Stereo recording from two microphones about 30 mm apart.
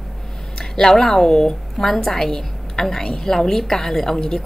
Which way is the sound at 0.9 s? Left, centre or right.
Centre.